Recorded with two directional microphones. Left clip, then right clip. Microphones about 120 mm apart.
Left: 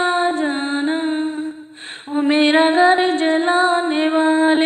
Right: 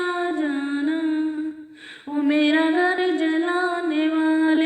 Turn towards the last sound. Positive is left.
turn(degrees=30)  # may be behind; listen again after turning